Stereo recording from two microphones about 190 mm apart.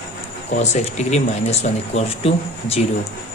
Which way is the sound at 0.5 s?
35° left (ahead or behind).